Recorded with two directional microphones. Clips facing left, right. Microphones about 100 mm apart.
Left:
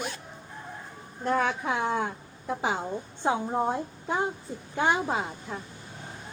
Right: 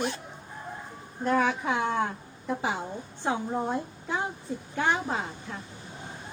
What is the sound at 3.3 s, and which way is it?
A woman's voice, 15° left (ahead or behind).